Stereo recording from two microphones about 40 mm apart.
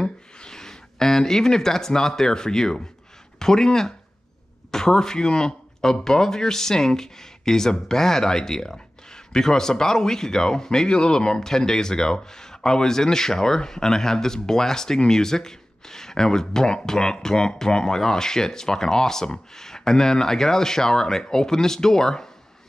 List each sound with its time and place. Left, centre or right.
0.0 s speech: centre